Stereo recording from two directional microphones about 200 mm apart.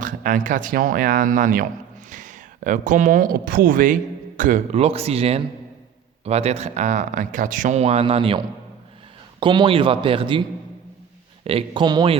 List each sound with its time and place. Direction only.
0.0 s speech: 40° right (ahead or behind); by 10.4 s 25° right (ahead or behind)
11.4 s speech: 25° right (ahead or behind)